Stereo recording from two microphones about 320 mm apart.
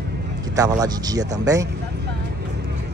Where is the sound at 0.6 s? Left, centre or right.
Centre.